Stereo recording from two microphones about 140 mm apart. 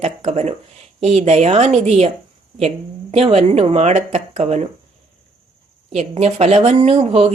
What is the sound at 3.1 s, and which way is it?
A woman's voice, 45° right (ahead or behind).